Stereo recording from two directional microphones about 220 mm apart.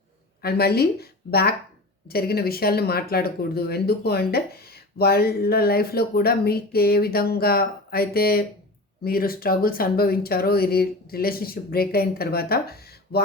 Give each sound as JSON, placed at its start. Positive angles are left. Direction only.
{"t": 0.4, "sound": "speech", "side_deg": 45}